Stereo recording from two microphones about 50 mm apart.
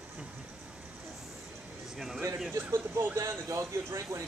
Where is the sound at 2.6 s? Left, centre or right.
Right.